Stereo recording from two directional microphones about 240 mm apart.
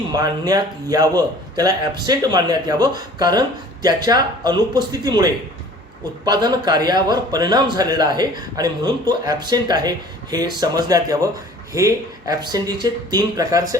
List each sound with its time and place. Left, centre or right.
0.2 s a man's voice: centre